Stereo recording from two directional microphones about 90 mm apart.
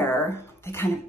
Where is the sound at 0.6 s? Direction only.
30° left (ahead or behind).